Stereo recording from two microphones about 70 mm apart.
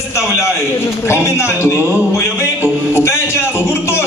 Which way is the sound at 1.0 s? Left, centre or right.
Left.